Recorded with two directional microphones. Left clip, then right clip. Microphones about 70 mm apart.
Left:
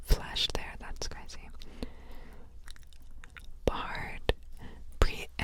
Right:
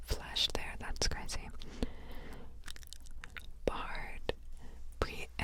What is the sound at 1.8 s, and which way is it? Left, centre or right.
Whispering, centre.